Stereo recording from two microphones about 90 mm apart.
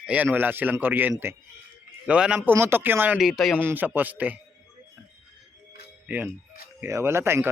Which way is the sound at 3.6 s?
20° right (ahead or behind).